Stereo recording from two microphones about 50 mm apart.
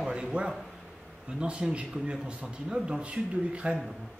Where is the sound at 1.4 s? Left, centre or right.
Right.